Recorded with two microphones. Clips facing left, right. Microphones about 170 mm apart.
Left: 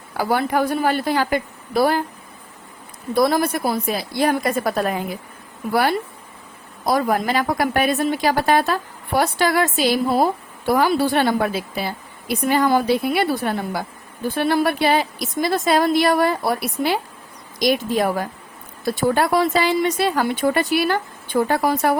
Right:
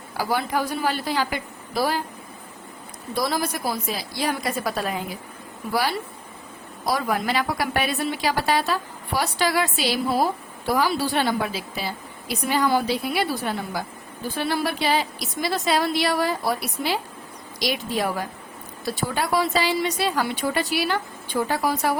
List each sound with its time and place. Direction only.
0.2 s a woman's voice: 55° left (ahead or behind)
3.2 s a woman's voice: 55° left (ahead or behind)